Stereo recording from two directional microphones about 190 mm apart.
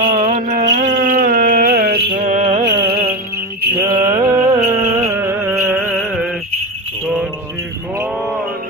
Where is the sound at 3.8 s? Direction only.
20° right (ahead or behind).